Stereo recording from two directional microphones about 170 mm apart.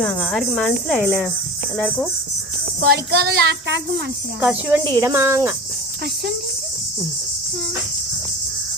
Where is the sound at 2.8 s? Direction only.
65° right (ahead or behind); by 4.0 s 90° right.